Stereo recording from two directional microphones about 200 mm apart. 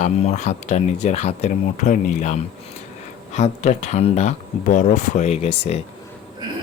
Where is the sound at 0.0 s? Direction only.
35° left (ahead or behind).